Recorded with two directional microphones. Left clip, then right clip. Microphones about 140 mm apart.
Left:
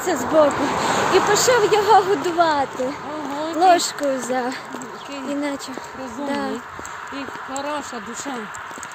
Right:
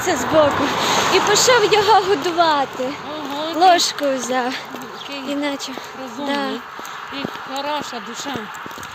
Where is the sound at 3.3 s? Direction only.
55° left (ahead or behind).